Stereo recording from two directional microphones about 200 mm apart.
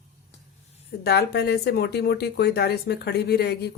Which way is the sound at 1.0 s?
55° left (ahead or behind).